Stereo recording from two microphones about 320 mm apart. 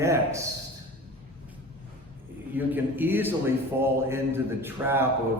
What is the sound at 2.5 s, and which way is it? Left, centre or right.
A man's voice, centre.